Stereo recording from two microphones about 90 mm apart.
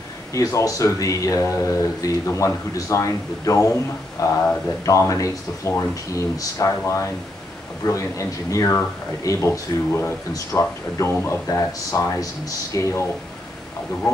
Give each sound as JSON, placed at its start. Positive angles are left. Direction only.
{"t": 0.3, "sound": "speech", "side_deg": 35}
{"t": 7.8, "sound": "speech", "side_deg": 35}